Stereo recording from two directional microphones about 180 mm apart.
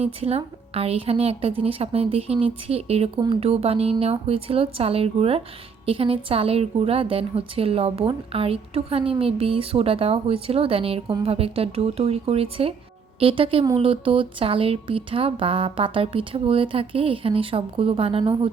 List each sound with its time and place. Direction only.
0.0 s a woman's voice: 35° right (ahead or behind)